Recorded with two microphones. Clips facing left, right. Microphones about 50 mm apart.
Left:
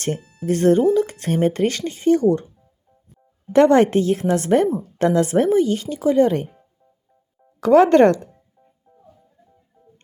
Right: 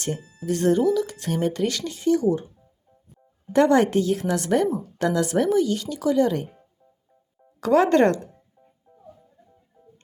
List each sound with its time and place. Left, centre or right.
0.0 s speech: left
3.5 s speech: left
7.6 s speech: left